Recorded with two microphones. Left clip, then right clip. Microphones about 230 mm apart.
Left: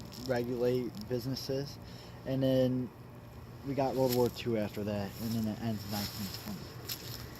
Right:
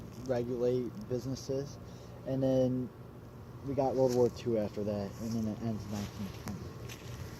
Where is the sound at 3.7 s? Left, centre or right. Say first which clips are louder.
Right 1 dB; left.